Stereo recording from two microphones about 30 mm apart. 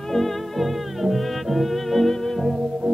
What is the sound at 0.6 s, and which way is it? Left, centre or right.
Music, centre.